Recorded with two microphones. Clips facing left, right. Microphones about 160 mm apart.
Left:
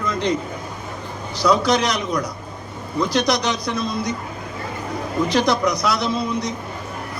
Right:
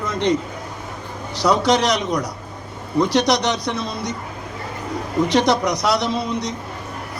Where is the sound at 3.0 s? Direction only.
70° right (ahead or behind).